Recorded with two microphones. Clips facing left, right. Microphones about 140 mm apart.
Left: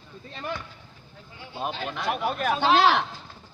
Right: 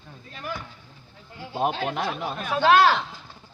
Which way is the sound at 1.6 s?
50° right (ahead or behind).